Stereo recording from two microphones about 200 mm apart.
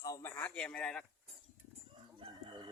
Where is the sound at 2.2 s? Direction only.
25° right (ahead or behind).